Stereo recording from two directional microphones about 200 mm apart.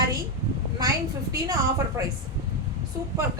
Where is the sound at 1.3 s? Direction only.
15° right (ahead or behind).